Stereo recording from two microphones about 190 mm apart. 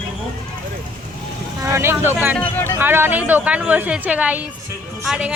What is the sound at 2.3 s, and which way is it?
Speech, 10° left (ahead or behind).